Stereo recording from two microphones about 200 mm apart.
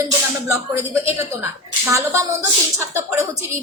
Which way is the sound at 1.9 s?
15° right (ahead or behind).